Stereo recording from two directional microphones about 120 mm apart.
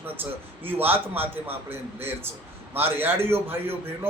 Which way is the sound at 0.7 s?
15° right (ahead or behind).